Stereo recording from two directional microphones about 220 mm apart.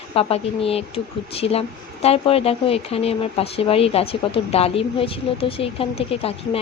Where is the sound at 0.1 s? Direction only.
25° left (ahead or behind).